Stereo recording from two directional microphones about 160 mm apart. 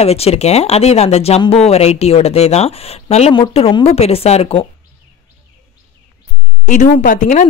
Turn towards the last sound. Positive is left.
turn(degrees=55)  # may be behind; listen again after turning